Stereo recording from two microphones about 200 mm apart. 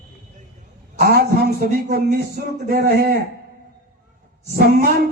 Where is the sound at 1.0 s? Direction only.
50° right (ahead or behind).